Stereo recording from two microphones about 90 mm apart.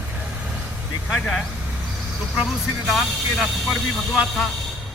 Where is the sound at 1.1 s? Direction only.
Centre (ahead or behind).